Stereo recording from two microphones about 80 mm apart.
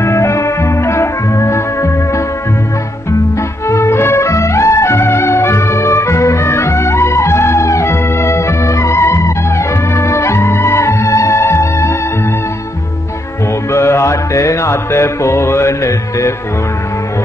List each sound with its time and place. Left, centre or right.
0.0 s music: left
3.6 s music: left
13.7 s music: left